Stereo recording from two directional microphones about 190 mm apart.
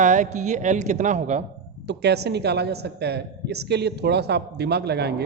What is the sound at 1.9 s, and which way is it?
A woman's voice, 60° right (ahead or behind).